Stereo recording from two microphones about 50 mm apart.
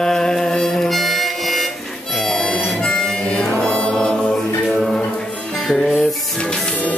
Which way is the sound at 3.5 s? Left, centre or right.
Centre.